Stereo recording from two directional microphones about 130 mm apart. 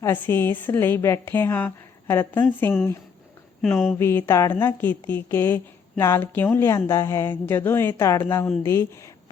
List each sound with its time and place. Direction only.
0.0 s a woman's voice: 15° left (ahead or behind)
3.6 s speech: centre (ahead or behind)
3.9 s a woman's voice: 15° left (ahead or behind)